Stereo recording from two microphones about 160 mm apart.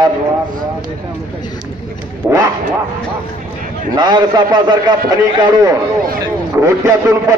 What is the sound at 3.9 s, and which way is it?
A man's voice, 25° right (ahead or behind).